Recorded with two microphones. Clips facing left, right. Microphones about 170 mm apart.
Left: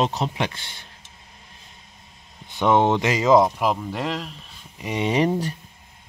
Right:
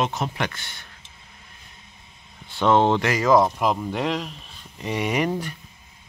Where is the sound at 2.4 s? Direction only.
15° left (ahead or behind).